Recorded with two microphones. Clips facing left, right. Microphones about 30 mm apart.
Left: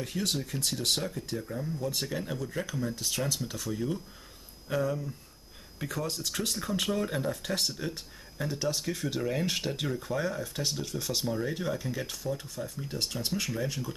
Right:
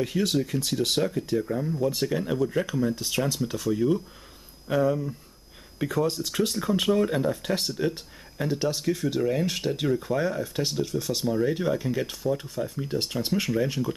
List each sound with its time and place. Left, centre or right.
0.1 s speech: centre